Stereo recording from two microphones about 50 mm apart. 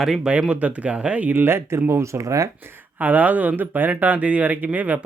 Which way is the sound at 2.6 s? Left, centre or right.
Right.